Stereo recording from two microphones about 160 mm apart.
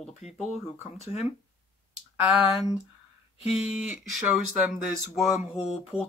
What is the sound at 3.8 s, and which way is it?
Speech, 5° right (ahead or behind).